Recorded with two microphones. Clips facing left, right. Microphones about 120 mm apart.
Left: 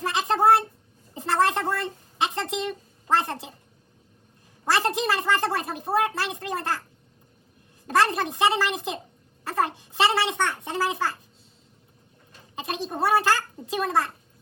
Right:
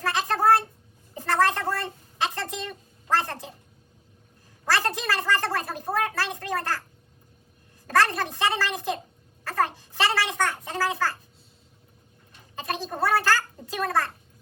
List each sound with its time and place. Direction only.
0.0 s a sound: 20° left (ahead or behind)
4.6 s gargling: 20° left (ahead or behind)
7.9 s a child's voice: 20° left (ahead or behind)
12.5 s a child's voice: 20° left (ahead or behind)